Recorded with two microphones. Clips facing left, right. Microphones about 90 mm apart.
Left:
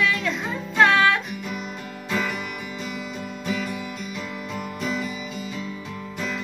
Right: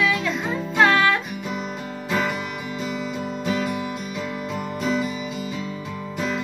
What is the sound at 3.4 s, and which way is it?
Music, 30° right (ahead or behind).